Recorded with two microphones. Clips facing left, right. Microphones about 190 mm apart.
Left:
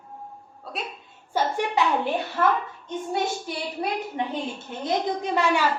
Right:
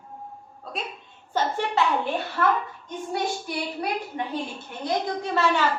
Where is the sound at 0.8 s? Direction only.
Centre (ahead or behind).